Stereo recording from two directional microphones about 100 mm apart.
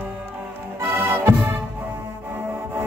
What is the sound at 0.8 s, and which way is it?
Music, 20° right (ahead or behind).